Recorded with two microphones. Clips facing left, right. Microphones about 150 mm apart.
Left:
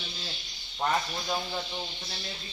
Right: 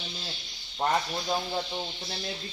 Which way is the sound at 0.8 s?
15° right (ahead or behind).